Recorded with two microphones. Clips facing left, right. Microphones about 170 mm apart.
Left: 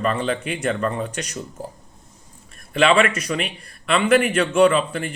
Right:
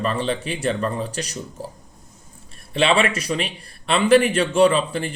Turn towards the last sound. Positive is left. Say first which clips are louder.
# even
turn(degrees=-30)  # may be behind; listen again after turning